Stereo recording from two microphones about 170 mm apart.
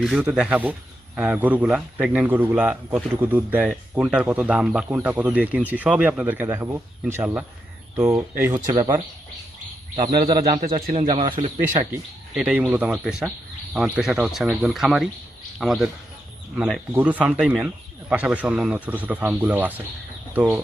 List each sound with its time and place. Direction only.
0.0 s speech: 5° right (ahead or behind)
8.7 s a man's voice: 25° right (ahead or behind)
10.1 s a man's voice: 25° right (ahead or behind)
12.4 s speech: 5° right (ahead or behind)